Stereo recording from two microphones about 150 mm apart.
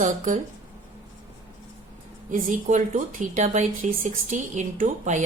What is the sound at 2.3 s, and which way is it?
A woman's voice, 55° right (ahead or behind).